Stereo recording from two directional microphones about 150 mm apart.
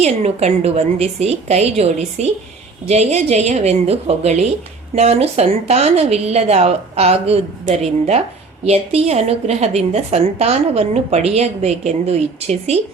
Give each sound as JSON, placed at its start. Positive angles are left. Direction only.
{"t": 0.0, "sound": "a woman's voice", "side_deg": -45}